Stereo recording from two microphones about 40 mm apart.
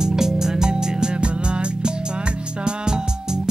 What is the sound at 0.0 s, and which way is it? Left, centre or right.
Music, centre.